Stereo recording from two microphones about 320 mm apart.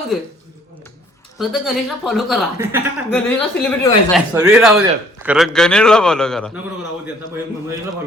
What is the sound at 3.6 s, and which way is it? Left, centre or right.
A man's voice, centre.